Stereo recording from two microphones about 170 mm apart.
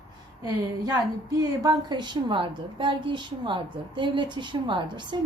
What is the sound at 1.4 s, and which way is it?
A woman's voice, 25° right (ahead or behind).